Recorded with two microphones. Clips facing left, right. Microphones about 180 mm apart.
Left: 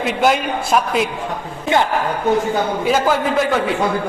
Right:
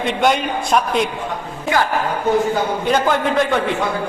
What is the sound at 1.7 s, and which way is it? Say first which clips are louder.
Speech: left 2 dB; 25° left (ahead or behind).